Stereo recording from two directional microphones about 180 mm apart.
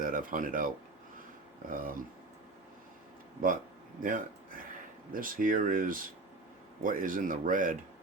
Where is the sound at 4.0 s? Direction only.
50° right (ahead or behind).